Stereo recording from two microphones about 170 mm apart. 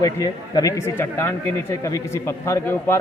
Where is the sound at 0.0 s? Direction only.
20° left (ahead or behind).